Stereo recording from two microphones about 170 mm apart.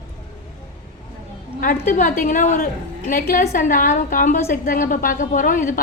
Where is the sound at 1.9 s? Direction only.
50° left (ahead or behind).